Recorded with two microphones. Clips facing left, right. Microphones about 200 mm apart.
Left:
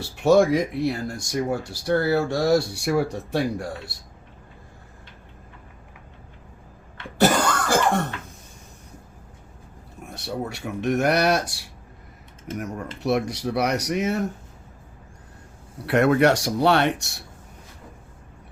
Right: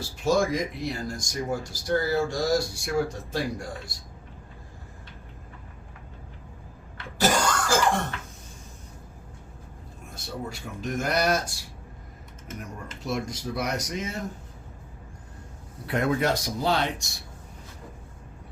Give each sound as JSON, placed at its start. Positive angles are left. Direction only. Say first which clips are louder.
{"t": 0.0, "sound": "speech", "louder": "left 7 dB", "side_deg": 65}
{"t": 7.2, "sound": "cough", "louder": "left 4 dB", "side_deg": 60}
{"t": 10.2, "sound": "speech", "louder": "left 5 dB", "side_deg": 70}
{"t": 13.0, "sound": "speech", "louder": "left 7 dB", "side_deg": 70}
{"t": 15.9, "sound": "speech", "louder": "left 7 dB", "side_deg": 75}